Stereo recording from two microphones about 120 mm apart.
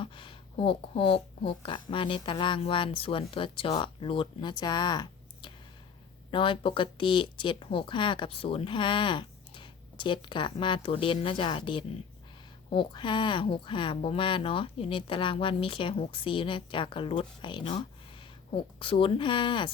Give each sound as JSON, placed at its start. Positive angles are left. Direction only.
{"t": 0.0, "sound": "speech", "side_deg": 45}